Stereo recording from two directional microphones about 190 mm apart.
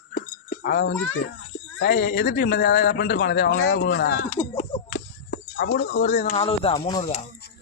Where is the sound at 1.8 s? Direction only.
45° left (ahead or behind).